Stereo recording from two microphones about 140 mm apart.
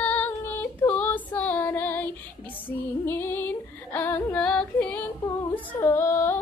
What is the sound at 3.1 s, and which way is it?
Female singing, 15° left (ahead or behind).